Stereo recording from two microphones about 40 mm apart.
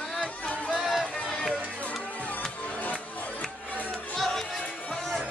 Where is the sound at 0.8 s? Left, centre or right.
Centre.